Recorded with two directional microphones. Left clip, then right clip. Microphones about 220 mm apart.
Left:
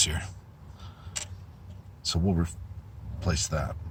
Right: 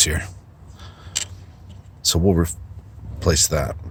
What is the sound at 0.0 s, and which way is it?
Speech, 45° right (ahead or behind).